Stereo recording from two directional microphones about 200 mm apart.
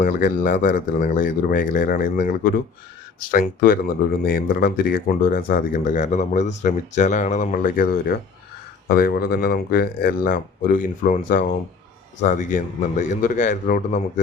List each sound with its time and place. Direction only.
0.0 s speech: 45° left (ahead or behind)